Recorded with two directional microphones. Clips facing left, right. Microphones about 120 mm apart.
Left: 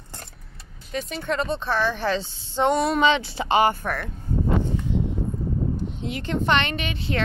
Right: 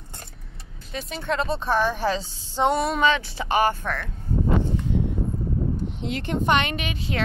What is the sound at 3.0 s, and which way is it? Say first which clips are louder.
Speech: left 2 dB; 25° left (ahead or behind).